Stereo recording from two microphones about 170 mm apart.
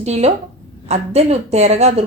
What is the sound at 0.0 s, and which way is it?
A woman's voice, 40° right (ahead or behind).